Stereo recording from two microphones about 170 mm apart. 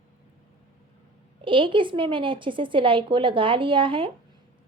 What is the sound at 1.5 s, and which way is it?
A woman's voice, 30° right (ahead or behind).